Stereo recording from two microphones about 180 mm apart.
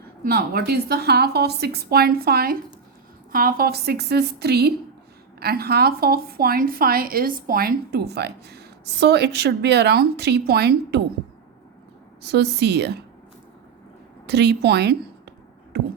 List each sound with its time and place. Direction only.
0.3 s a woman's voice: 60° right (ahead or behind)
12.2 s a woman's voice: 65° right (ahead or behind)
14.3 s a woman's voice: 65° right (ahead or behind)
15.7 s heart murmur: 65° right (ahead or behind)